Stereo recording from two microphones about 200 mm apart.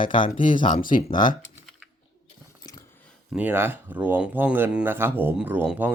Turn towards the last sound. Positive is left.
turn(degrees=-10)  # may be behind; listen again after turning